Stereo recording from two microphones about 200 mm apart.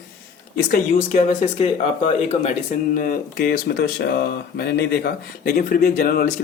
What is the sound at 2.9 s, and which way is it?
Speech, 45° left (ahead or behind).